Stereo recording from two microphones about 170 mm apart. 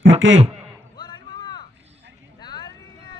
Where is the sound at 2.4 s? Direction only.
25° left (ahead or behind).